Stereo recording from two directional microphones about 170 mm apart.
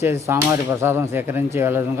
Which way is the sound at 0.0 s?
15° right (ahead or behind).